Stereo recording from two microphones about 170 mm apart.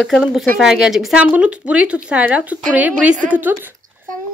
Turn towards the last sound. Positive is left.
turn(degrees=-10)  # may be behind; listen again after turning